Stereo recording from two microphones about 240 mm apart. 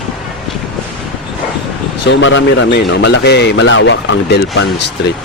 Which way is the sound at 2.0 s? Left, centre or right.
Left.